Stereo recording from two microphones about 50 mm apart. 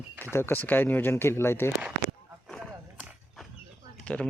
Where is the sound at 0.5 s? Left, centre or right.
Left.